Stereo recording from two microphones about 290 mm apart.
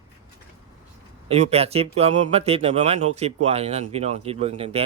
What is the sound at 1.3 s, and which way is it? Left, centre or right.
Speech, right.